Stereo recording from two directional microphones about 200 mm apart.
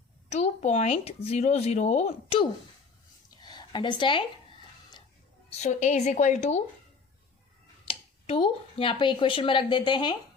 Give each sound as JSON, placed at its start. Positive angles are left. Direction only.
{"t": 0.3, "sound": "speech", "side_deg": 35}
{"t": 3.2, "sound": "a sound", "side_deg": 20}
{"t": 5.5, "sound": "speech", "side_deg": 35}
{"t": 7.9, "sound": "speech", "side_deg": 30}